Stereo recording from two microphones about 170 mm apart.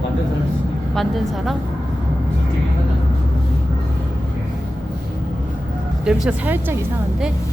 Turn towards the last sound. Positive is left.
turn(degrees=-10)  # may be behind; listen again after turning